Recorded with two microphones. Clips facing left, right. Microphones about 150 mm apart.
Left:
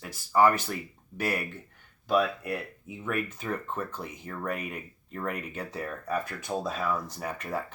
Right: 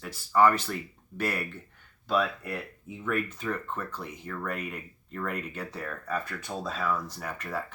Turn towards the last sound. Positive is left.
turn(degrees=15)  # may be behind; listen again after turning